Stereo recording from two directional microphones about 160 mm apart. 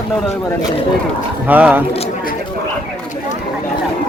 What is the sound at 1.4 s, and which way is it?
Speech, 10° right (ahead or behind).